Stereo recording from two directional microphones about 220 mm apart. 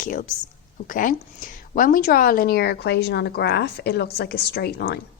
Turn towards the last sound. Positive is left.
turn(degrees=45)  # may be behind; listen again after turning